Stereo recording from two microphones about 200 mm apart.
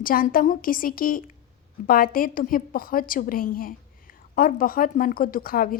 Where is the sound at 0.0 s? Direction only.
45° left (ahead or behind).